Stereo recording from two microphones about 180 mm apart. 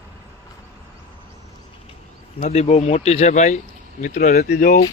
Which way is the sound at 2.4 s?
40° left (ahead or behind).